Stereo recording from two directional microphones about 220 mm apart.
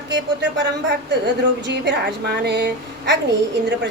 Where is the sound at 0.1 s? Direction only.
55° right (ahead or behind).